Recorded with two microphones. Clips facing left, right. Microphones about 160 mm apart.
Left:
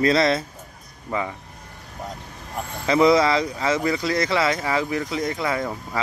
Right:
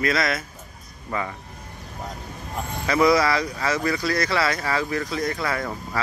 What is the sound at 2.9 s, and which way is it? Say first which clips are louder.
Speech: left 2 dB; 25° left (ahead or behind).